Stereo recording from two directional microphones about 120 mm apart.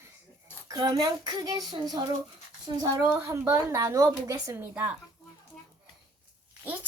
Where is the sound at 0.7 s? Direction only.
35° right (ahead or behind).